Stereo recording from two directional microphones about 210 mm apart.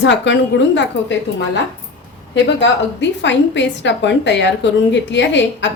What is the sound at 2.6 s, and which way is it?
A woman's voice, 60° left (ahead or behind).